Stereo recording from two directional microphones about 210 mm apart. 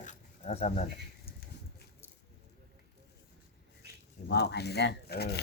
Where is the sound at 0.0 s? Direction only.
35° left (ahead or behind).